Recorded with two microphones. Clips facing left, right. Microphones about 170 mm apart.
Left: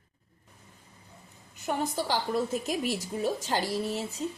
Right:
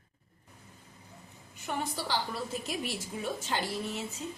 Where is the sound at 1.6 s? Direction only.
40° left (ahead or behind).